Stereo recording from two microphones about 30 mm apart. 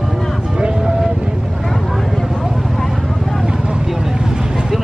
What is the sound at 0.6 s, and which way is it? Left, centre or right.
Vehicle, right.